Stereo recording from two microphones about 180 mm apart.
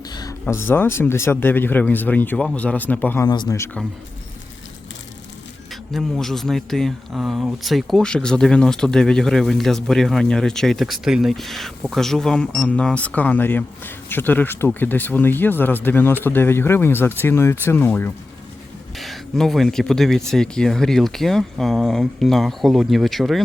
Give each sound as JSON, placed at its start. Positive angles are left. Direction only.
{"t": 0.1, "sound": "a sound", "side_deg": 20}
{"t": 0.4, "sound": "speech", "side_deg": 10}
{"t": 3.2, "sound": "speech", "side_deg": 25}
{"t": 5.9, "sound": "speech", "side_deg": 0}